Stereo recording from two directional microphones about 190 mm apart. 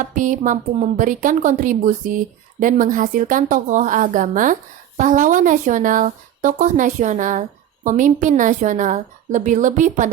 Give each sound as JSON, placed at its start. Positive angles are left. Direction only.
{"t": 0.0, "sound": "a woman's voice", "side_deg": -45}